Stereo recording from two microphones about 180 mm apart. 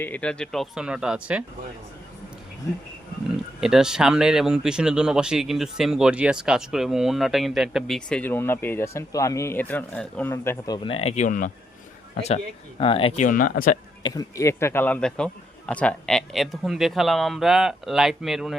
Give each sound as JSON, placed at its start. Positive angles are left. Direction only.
{"t": 0.0, "sound": "speech", "side_deg": 10}
{"t": 3.6, "sound": "speech", "side_deg": -5}
{"t": 10.8, "sound": "speech", "side_deg": 35}
{"t": 12.8, "sound": "speech", "side_deg": 30}
{"t": 13.2, "sound": "speech", "side_deg": 50}
{"t": 14.0, "sound": "speech", "side_deg": 20}